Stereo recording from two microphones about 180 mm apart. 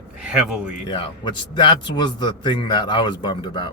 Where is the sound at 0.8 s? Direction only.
25° left (ahead or behind).